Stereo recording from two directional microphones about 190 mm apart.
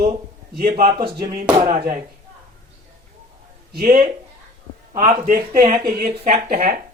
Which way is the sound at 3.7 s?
45° right (ahead or behind).